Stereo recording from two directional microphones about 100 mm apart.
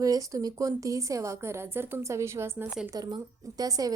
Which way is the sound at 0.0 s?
35° right (ahead or behind).